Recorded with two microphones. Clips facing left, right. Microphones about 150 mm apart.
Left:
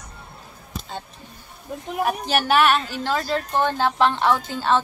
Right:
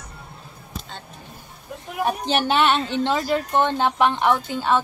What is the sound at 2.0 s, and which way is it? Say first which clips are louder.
A woman's voice: right 1 dB; 25° right (ahead or behind).